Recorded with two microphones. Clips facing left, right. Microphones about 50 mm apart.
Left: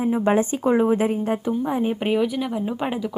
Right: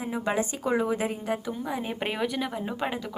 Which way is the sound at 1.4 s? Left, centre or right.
Left.